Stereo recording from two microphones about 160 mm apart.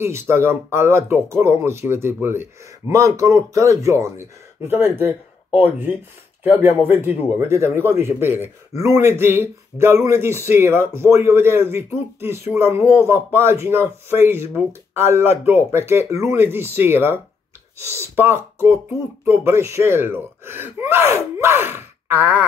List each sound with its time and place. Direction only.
0.0 s speech: 15° right (ahead or behind)
21.4 s sigh: 15° right (ahead or behind)